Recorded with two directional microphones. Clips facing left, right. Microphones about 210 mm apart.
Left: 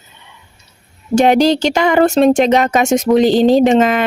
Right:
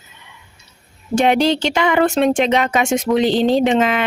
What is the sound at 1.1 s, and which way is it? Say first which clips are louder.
Speech: left 4 dB; 40° left (ahead or behind).